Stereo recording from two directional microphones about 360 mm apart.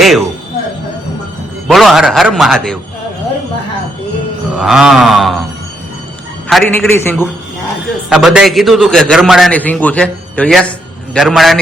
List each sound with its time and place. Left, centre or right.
0.0 s a man's voice: centre
1.6 s a man's voice: centre
4.5 s a man's voice: centre
6.5 s a man's voice: centre